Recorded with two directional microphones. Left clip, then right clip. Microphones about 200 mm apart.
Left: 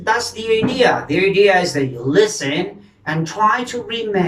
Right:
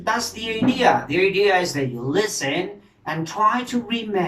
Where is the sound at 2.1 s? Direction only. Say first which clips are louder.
Left 7 dB; 5° right (ahead or behind).